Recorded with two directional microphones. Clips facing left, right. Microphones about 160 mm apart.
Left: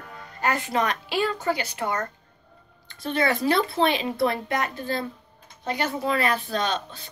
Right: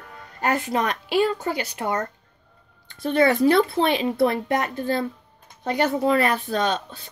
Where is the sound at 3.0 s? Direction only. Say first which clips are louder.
Right 6 dB; 50° right (ahead or behind).